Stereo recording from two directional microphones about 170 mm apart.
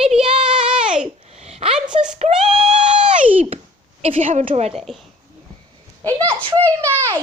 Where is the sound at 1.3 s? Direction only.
40° right (ahead or behind).